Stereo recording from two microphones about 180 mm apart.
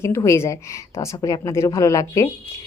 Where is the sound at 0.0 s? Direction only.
15° left (ahead or behind).